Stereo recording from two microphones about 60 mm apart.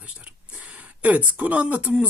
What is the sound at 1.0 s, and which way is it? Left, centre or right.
Speech, right.